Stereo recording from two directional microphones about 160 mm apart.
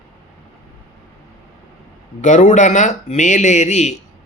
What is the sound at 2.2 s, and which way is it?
Speech, 50° left (ahead or behind).